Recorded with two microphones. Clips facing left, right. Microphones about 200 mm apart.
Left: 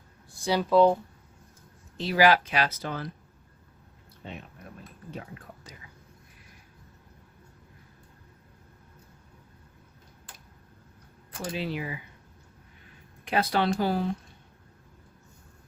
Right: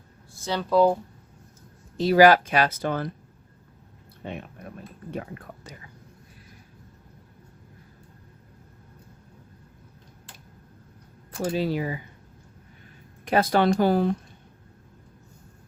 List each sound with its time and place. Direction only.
0.3 s a sound: 10° left (ahead or behind)
0.7 s speech: 5° right (ahead or behind)
2.0 s speech: 40° right (ahead or behind)
4.2 s speech: 55° right (ahead or behind)
11.3 s speech: 40° right (ahead or behind)
13.2 s speech: 45° right (ahead or behind)